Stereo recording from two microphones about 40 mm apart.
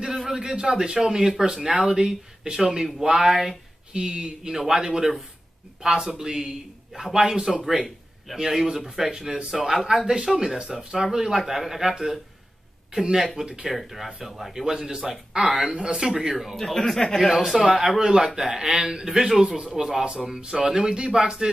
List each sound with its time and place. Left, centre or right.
0.0 s a man's voice: centre
3.9 s a man's voice: right
13.7 s speech: centre; by 15.0 s right
15.4 s a man's voice: centre
15.7 s a man's voice: right; by 16.7 s centre
16.7 s speech: centre
17.5 s a man's voice: centre